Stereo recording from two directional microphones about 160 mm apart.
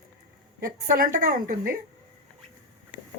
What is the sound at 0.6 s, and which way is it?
A woman's voice, 65° right (ahead or behind).